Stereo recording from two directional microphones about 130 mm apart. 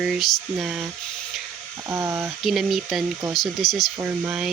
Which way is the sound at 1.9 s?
20° right (ahead or behind).